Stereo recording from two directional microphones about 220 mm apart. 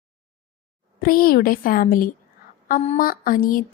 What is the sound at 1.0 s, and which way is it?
Speech, 40° left (ahead or behind).